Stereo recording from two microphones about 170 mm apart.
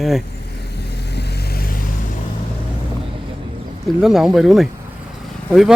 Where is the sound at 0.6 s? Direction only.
80° left.